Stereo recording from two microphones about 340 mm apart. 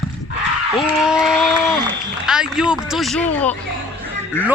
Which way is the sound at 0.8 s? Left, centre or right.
Centre.